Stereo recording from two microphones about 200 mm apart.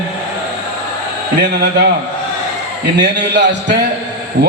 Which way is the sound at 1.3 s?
55° right (ahead or behind).